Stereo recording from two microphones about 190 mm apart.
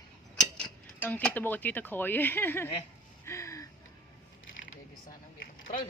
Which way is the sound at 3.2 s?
15° left (ahead or behind).